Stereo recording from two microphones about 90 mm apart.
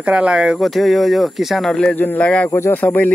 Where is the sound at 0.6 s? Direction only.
Centre (ahead or behind).